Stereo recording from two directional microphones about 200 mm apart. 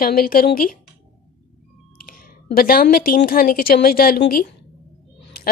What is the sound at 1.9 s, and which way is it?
A woman's voice, 45° left (ahead or behind).